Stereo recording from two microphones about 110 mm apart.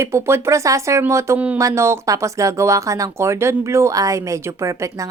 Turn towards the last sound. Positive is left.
turn(degrees=-30)  # may be behind; listen again after turning